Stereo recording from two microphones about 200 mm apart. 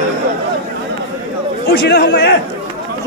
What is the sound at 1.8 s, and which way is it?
Speech, 55° left (ahead or behind).